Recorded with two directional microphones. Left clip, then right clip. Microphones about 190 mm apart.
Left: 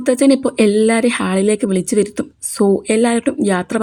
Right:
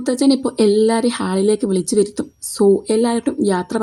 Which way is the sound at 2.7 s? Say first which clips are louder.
Left 2 dB; 15° left (ahead or behind).